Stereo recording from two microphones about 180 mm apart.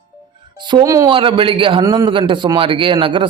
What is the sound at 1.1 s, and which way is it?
Speech, 30° right (ahead or behind).